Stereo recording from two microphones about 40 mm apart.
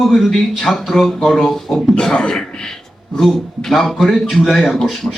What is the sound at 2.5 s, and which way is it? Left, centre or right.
Throat clearing, centre.